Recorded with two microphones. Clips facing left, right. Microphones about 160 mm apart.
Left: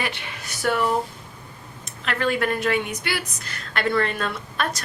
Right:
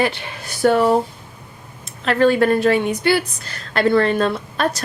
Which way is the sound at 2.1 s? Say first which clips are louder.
Right 9 dB; 30° right (ahead or behind).